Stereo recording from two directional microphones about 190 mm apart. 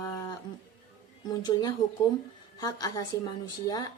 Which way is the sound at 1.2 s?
20° left (ahead or behind).